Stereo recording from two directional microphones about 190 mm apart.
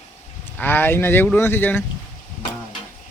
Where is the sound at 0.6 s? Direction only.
10° left (ahead or behind).